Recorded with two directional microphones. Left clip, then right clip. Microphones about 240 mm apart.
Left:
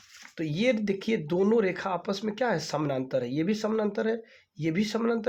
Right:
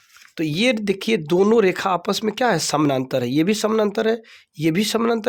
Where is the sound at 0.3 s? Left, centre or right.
Right.